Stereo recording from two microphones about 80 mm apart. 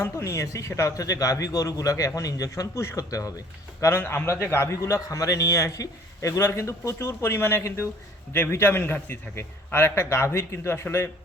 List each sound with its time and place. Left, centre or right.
0.0 s a man's voice: left
3.8 s a man's voice: left